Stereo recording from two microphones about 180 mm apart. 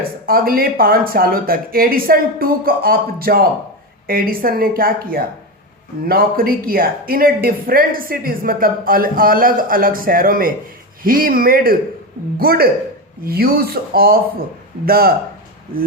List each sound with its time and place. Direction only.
0.3 s speech: 55° right (ahead or behind)